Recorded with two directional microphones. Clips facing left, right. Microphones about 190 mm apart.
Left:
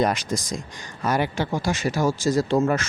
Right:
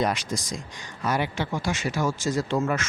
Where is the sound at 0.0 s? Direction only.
45° left (ahead or behind).